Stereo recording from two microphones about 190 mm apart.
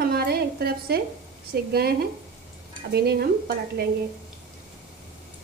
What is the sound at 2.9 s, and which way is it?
A woman's voice, 55° right (ahead or behind).